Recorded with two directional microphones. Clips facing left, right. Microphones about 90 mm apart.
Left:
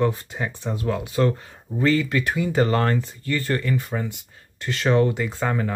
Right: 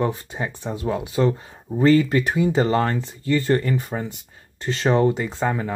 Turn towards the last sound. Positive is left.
turn(degrees=-20)  # may be behind; listen again after turning